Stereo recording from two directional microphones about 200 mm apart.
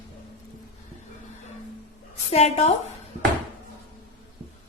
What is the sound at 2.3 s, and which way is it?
Speech, 30° left (ahead or behind).